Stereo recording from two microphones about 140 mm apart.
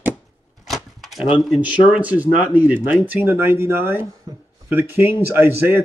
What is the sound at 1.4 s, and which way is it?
Speech, 5° right (ahead or behind).